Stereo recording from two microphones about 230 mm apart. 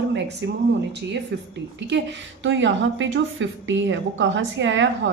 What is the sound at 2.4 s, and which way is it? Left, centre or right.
A woman's voice, right.